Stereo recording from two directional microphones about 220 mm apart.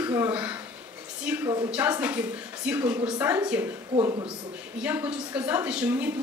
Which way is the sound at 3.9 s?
20° right (ahead or behind).